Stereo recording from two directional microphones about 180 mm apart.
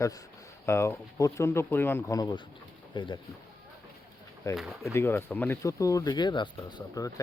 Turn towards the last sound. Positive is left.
turn(degrees=20)  # may be behind; listen again after turning